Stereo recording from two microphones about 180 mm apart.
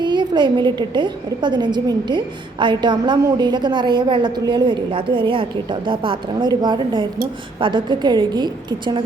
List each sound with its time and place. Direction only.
0.0 s a woman's voice: 25° right (ahead or behind)